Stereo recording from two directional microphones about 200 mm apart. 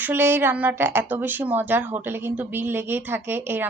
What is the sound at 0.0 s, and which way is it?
A woman's voice, 10° right (ahead or behind).